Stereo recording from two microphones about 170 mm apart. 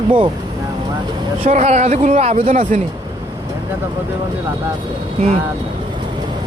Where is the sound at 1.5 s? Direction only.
40° right (ahead or behind).